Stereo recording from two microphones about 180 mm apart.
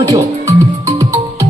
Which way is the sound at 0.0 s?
20° right (ahead or behind).